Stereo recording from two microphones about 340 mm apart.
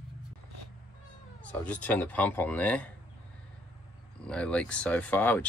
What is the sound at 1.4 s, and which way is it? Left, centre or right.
Speech, centre.